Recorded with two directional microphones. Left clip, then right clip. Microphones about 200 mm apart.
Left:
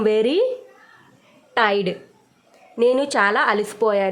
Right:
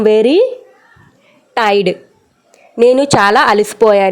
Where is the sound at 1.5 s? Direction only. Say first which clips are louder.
Right 7 dB; 35° right (ahead or behind).